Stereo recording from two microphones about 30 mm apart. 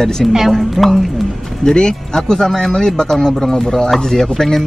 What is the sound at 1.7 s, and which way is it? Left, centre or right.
Speech, left.